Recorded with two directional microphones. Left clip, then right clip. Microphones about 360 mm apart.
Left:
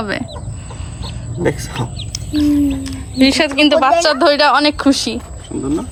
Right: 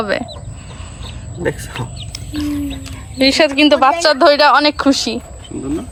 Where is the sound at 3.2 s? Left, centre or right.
Centre.